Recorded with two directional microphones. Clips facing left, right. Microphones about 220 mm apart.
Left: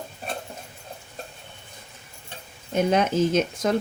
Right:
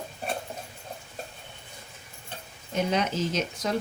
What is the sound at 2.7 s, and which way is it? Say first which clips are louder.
Speech: left 6 dB; 50° left (ahead or behind).